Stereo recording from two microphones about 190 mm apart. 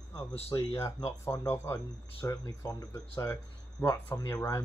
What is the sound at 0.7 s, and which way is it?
Speech, 15° left (ahead or behind).